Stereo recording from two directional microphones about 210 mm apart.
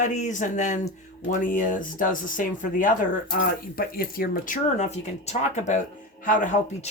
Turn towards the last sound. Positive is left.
turn(degrees=35)  # may be behind; listen again after turning